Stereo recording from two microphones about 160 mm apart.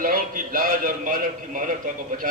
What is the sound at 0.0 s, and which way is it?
A man's voice, 60° right (ahead or behind).